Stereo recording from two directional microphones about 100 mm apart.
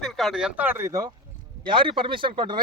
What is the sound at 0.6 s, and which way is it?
Speech, 20° right (ahead or behind).